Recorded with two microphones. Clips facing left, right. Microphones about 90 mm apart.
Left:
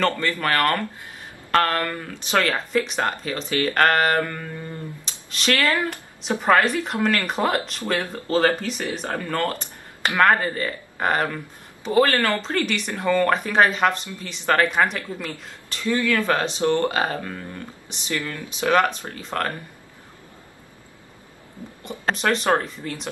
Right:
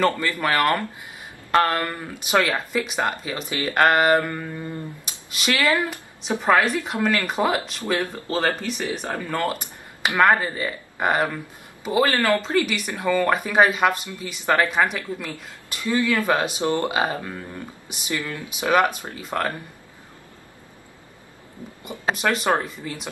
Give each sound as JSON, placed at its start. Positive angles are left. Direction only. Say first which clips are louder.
{"t": 0.0, "sound": "speech", "louder": "right 1 dB", "side_deg": -10}
{"t": 15.1, "sound": "speech", "louder": "left 1 dB", "side_deg": -5}
{"t": 15.8, "sound": "speech", "louder": "even", "side_deg": -20}
{"t": 21.8, "sound": "speech", "louder": "even", "side_deg": -5}